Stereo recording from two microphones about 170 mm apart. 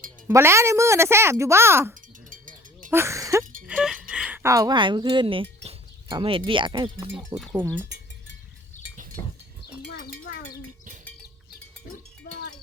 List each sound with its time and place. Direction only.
0.3 s speech: 15° right (ahead or behind)
2.3 s wind chime: 50° right (ahead or behind)
2.9 s speech: 15° right (ahead or behind)
3.7 s music: 5° right (ahead or behind)
4.1 s a sound: 5° right (ahead or behind)
4.4 s speech: 20° right (ahead or behind)
7.3 s speech: 10° right (ahead or behind)
9.2 s livestock: 20° left (ahead or behind)
9.8 s a sound: 65° left (ahead or behind)
12.3 s wind chime: 80° left